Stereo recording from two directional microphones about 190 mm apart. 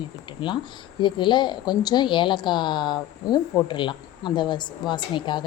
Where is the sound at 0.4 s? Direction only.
25° left (ahead or behind).